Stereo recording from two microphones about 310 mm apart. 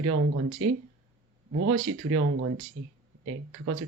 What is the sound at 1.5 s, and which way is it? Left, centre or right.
Speech, right.